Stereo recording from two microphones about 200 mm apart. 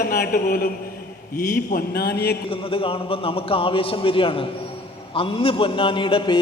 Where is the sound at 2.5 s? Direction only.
25° left (ahead or behind).